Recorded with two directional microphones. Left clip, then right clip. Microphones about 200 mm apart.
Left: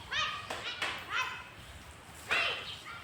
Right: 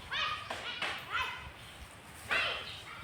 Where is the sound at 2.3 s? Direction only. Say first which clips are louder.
Left 1 dB; 55° left (ahead or behind).